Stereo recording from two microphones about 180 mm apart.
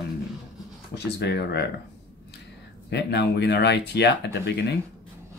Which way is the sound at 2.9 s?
70° left (ahead or behind).